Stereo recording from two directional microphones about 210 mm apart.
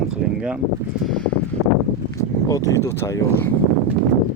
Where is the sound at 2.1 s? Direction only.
15° left (ahead or behind).